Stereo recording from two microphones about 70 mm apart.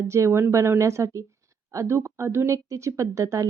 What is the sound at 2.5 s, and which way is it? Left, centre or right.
Speech, right.